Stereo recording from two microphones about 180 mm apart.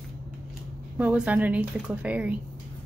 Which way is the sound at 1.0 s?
10° right (ahead or behind).